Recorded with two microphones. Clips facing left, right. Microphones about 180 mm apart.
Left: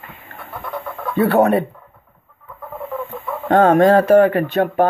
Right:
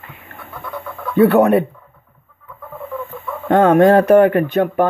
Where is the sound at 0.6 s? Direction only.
25° left (ahead or behind).